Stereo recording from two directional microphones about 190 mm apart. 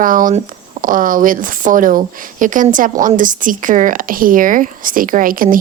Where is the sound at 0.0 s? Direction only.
45° right (ahead or behind).